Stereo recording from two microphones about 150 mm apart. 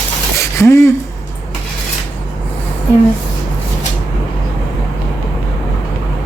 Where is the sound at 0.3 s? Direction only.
20° left (ahead or behind).